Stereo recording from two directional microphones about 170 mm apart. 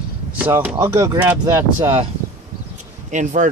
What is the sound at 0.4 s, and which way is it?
Speech, 10° right (ahead or behind).